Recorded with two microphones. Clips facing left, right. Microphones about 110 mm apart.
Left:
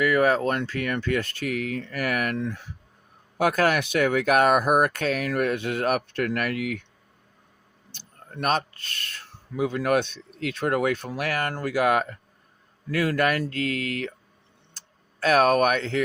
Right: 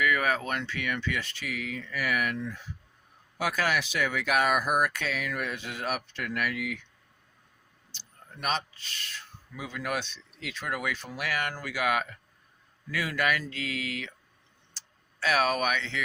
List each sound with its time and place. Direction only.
0.0 s speech: 35° left (ahead or behind); by 2.6 s 60° left (ahead or behind)
3.3 s speech: 50° left (ahead or behind)
7.9 s speech: 50° left (ahead or behind)
14.7 s tick-tock: 45° left (ahead or behind)